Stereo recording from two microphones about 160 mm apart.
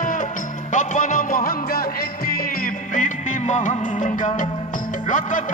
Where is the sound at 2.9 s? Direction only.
50° left (ahead or behind).